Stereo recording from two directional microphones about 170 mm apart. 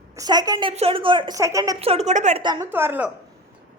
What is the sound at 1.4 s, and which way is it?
Speech, 20° right (ahead or behind).